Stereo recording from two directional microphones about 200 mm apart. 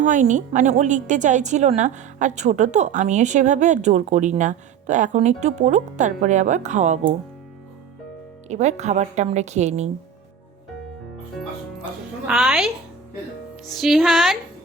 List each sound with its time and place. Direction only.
0.0 s a woman's voice: 40° right (ahead or behind)
8.4 s a woman's voice: 35° right (ahead or behind)
12.3 s music: centre (ahead or behind)